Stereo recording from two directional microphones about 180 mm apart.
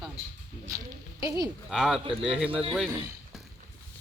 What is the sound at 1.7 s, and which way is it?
Speech, centre (ahead or behind).